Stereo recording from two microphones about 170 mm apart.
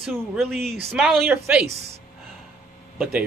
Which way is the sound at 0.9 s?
Centre (ahead or behind).